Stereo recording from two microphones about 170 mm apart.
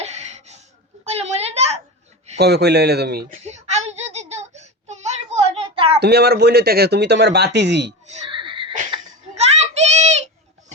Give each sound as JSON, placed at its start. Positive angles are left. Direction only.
{"t": 0.0, "sound": "a sound", "side_deg": -40}
{"t": 2.4, "sound": "speech", "side_deg": -75}
{"t": 3.4, "sound": "a sound", "side_deg": -40}
{"t": 6.0, "sound": "speech", "side_deg": -75}
{"t": 8.2, "sound": "wheeze", "side_deg": -30}
{"t": 9.3, "sound": "child singing", "side_deg": -40}